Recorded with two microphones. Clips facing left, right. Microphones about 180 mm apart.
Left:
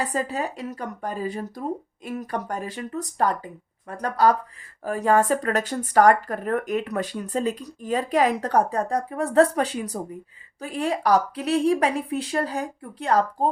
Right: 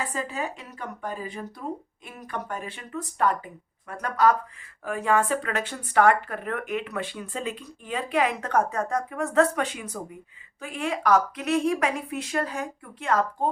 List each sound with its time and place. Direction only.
0.0 s speech: 40° left (ahead or behind)